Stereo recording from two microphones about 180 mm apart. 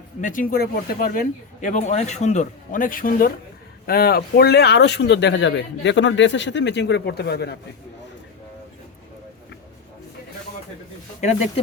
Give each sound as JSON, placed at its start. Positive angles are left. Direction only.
{"t": 0.2, "sound": "speech", "side_deg": 50}
{"t": 1.6, "sound": "speech", "side_deg": 40}
{"t": 11.2, "sound": "speech", "side_deg": 40}